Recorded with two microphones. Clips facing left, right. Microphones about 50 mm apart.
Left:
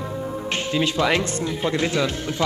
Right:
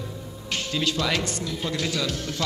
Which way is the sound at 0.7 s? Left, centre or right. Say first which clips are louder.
Left 5 dB; left.